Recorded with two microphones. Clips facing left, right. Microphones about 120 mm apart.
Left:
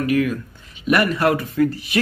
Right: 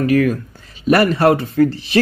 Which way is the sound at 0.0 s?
40° right (ahead or behind).